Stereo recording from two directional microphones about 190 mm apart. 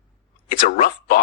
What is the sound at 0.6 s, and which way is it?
Speech, 45° left (ahead or behind).